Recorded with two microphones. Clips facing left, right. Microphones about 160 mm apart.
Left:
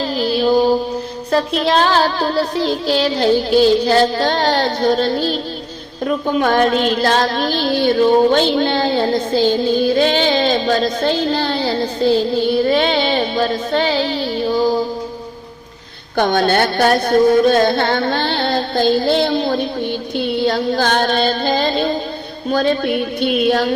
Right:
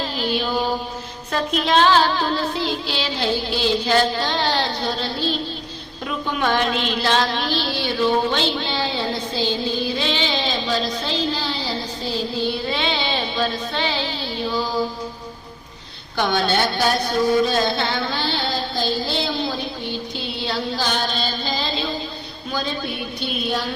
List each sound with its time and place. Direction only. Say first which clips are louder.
0.2 s music: left 9 dB; 40° left (ahead or behind)
1.3 s child singing: left 4 dB; 35° left (ahead or behind)
16.1 s child singing: left 6 dB; 50° left (ahead or behind)
20.1 s female singing: left 13 dB; 50° left (ahead or behind)